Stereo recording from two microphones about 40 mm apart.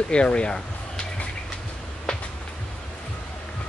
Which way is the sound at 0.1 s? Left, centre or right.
Left.